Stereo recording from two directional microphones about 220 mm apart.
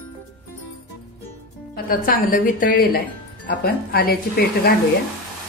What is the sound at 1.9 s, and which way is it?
A woman's voice, 40° left (ahead or behind).